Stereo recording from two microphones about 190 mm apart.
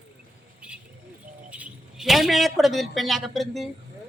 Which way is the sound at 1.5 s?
5° right (ahead or behind).